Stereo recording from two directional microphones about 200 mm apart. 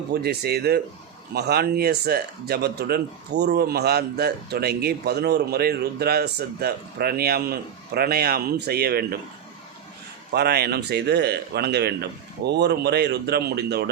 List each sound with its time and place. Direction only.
0.1 s speech: 55° right (ahead or behind)
10.3 s speech: 55° right (ahead or behind)